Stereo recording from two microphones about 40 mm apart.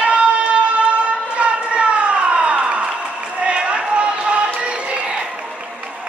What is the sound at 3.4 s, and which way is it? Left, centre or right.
Run, right.